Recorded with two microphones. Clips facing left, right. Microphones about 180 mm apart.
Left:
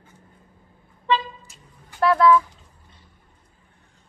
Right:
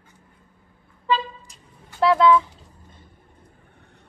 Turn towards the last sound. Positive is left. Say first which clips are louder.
# right 6 dB
turn(degrees=-65)  # may be behind; listen again after turning